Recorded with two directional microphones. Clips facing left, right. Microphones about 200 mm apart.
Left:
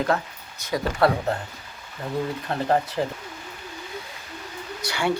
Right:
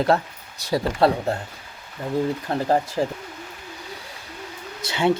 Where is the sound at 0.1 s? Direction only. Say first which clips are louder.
Right 4 dB; 35° right (ahead or behind).